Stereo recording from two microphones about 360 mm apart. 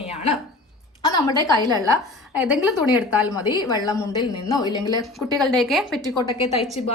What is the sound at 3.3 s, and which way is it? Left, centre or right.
A woman's voice, centre.